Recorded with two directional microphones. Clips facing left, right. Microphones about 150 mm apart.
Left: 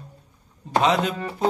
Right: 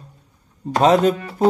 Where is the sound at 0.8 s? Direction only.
45° right (ahead or behind).